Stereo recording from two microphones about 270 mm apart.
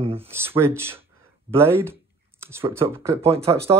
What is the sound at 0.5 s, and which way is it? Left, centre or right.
Speech, centre.